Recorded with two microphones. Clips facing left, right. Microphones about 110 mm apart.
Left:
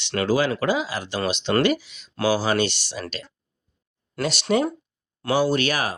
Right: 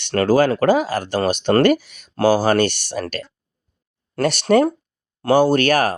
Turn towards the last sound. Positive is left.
turn(degrees=-55)  # may be behind; listen again after turning